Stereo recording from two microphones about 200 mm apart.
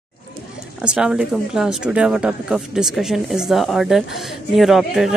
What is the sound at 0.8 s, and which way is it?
A woman's voice, 5° right (ahead or behind).